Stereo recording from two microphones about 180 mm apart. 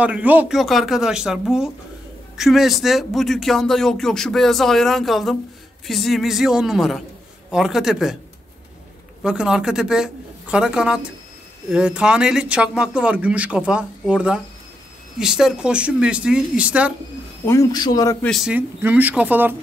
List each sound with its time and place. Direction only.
0.0 s speech: 10° right (ahead or behind)
9.2 s speech: 5° right (ahead or behind)
17.5 s speech: 20° left (ahead or behind)
18.2 s speech: centre (ahead or behind)